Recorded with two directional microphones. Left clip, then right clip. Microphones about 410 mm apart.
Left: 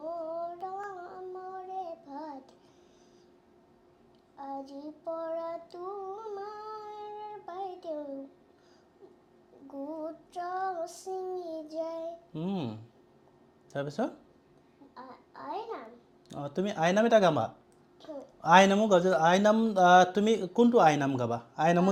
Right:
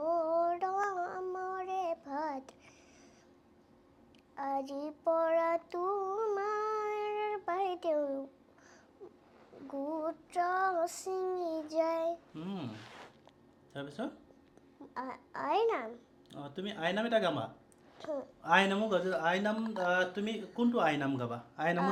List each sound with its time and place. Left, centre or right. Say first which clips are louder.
0.0 s child singing: right 5 dB; right
4.4 s child singing: right 4 dB; right
6.4 s child singing: right 7 dB; right
9.8 s child singing: right 1 dB; right
12.3 s a sound: left 7 dB; left
13.7 s speech: left 8 dB; left
14.9 s babbling: right 7 dB; right
16.3 s speech: left 8 dB; left